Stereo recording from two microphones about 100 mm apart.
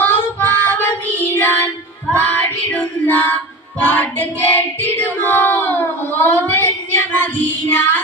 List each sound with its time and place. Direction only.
0.0 s child singing: 15° left (ahead or behind)
2.1 s female singing: 20° left (ahead or behind)
3.8 s child singing: 20° left (ahead or behind)